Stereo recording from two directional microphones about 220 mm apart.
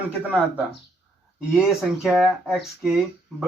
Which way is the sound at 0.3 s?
5° right (ahead or behind).